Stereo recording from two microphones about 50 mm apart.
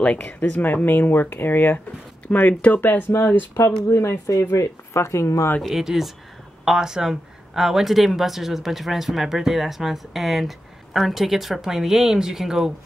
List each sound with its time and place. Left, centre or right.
0.0 s speech: left
0.4 s speech: left
2.2 s speech: left
3.6 s speech: left
5.8 s speech: centre